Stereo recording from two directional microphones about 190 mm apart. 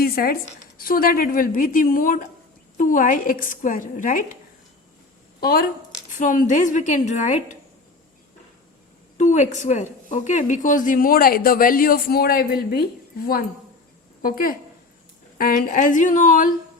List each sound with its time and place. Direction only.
0.0 s a sound: 50° left (ahead or behind)
0.8 s speech: 50° left (ahead or behind)
5.4 s a woman's voice: 50° left (ahead or behind)
9.1 s a woman's voice: 40° left (ahead or behind)